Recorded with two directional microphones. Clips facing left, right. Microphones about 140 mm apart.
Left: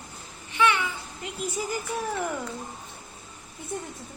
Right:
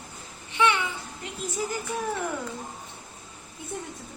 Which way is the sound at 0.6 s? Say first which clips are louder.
Even; 25° right (ahead or behind).